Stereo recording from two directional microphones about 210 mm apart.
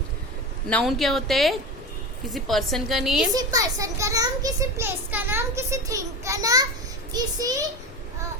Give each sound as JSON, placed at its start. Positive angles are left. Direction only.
{"t": 0.7, "sound": "a woman's voice", "side_deg": 0}
{"t": 3.3, "sound": "a child's voice", "side_deg": -15}